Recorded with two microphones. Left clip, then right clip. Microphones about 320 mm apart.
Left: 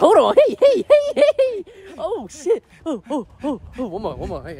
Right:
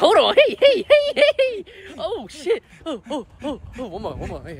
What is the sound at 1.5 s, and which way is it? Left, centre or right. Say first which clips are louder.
Speech: left 2 dB; centre.